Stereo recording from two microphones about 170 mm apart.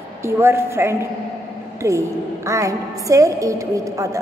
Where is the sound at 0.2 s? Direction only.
15° right (ahead or behind).